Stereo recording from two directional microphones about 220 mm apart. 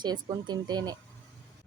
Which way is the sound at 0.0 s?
20° right (ahead or behind).